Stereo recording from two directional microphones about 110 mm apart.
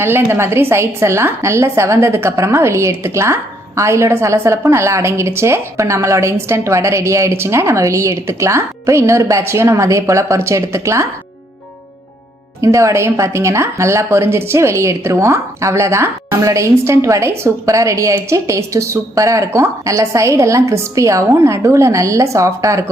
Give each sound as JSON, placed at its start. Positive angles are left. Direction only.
{"t": 0.0, "sound": "a woman's voice", "side_deg": -20}
{"t": 12.6, "sound": "a woman's voice", "side_deg": -30}